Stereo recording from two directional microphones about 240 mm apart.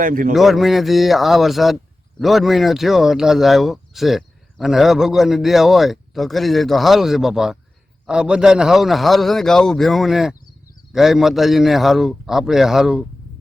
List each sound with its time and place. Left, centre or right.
0.0 s speech: right
0.3 s speech: centre